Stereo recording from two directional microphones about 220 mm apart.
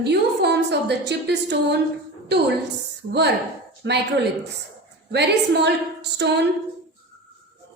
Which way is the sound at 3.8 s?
55° right (ahead or behind).